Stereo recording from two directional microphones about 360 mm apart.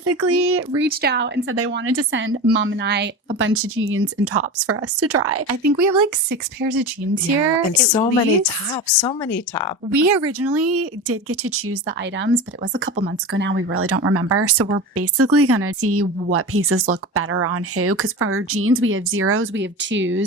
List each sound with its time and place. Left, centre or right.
0.0 s speech: right
5.8 s speech: right
7.9 s speech: centre
9.9 s speech: right